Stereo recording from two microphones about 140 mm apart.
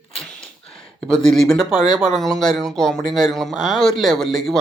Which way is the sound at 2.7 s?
5° left (ahead or behind).